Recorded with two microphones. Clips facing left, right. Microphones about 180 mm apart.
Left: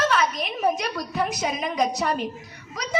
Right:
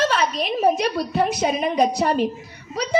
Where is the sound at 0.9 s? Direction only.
30° right (ahead or behind).